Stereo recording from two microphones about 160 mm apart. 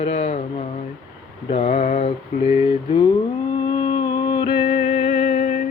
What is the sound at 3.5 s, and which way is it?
Music, 30° left (ahead or behind).